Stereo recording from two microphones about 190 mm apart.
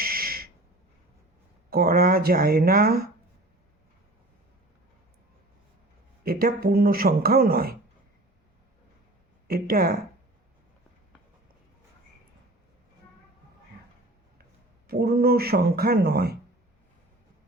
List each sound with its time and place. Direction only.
0.0 s a sound: 50° right (ahead or behind)
1.7 s a man's voice: 50° right (ahead or behind)
6.2 s a man's voice: 50° right (ahead or behind)
9.5 s a man's voice: 50° right (ahead or behind)
14.8 s speech: 55° right (ahead or behind)